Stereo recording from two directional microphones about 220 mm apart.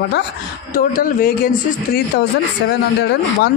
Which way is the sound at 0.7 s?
40° left (ahead or behind).